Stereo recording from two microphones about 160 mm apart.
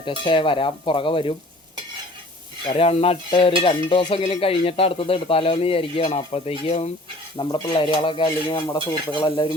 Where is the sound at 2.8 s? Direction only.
40° left (ahead or behind).